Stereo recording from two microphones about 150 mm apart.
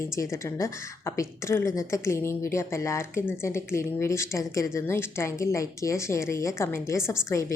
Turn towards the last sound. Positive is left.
turn(degrees=20)  # may be behind; listen again after turning